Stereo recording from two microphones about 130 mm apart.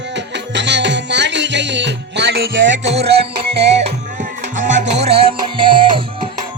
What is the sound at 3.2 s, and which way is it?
Music, 55° right (ahead or behind).